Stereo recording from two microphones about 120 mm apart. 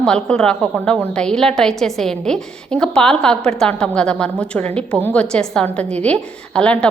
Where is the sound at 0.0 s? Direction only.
5° left (ahead or behind).